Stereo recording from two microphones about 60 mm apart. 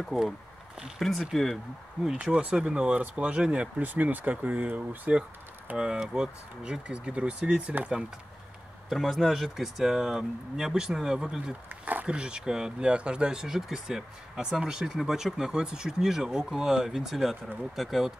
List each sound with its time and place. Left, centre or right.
0.9 s speech: centre
2.2 s speech: centre
3.8 s speech: right
5.8 s speech: centre
8.8 s speech: centre
11.7 s speech: right
12.2 s speech: centre